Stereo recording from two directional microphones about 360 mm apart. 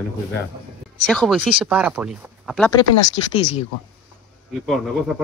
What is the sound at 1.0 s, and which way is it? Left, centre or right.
Speech, centre.